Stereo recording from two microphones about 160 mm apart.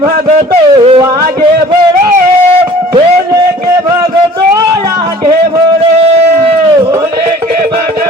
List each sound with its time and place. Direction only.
0.3 s speech: 45° right (ahead or behind)